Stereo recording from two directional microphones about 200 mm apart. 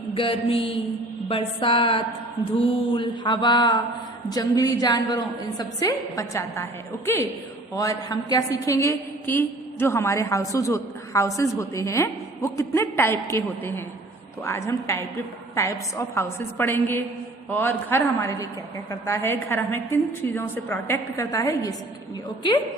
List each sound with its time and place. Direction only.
0.1 s a woman's voice: 25° left (ahead or behind)